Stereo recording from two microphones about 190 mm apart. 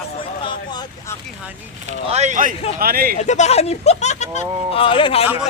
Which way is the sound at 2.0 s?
35° right (ahead or behind).